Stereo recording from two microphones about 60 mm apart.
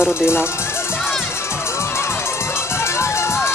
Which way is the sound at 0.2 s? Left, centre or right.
Left.